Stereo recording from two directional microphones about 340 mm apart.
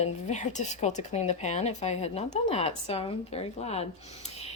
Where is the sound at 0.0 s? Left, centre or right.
Left.